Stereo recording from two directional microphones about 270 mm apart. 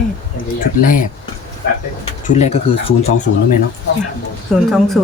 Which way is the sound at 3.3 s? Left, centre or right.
Left.